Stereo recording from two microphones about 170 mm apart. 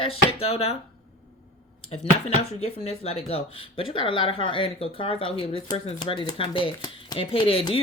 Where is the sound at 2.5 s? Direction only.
35° left (ahead or behind).